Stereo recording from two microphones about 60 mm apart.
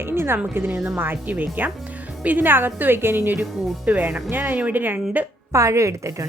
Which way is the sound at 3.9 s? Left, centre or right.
Right.